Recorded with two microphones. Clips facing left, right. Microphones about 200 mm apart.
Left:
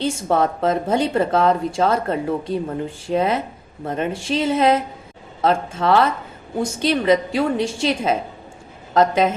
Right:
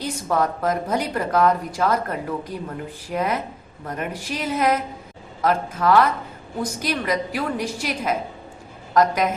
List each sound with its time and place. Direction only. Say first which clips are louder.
0.0 s a woman's voice: left 4 dB; 25° left (ahead or behind)